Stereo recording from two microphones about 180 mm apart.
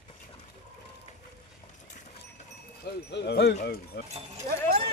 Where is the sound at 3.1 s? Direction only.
70° left (ahead or behind).